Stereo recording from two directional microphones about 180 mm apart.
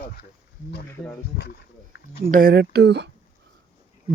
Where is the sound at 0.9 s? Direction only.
10° left (ahead or behind).